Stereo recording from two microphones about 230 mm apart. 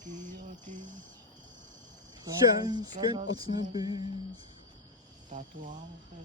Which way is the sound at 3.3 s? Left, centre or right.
Centre.